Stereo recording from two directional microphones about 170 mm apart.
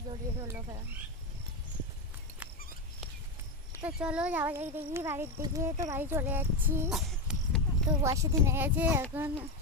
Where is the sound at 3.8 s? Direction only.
5° right (ahead or behind).